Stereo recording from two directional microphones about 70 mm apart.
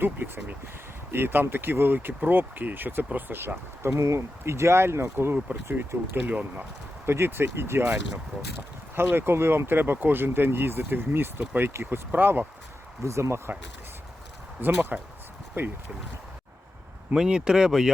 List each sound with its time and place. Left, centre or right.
0.0 s a sound: right
1.1 s speech: right
6.1 s speech: right
7.0 s speech: right
13.1 s speech: right
14.6 s speech: right
17.2 s speech: centre